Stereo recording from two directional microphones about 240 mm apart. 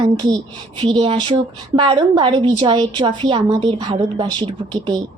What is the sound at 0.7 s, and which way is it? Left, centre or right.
Speech, centre.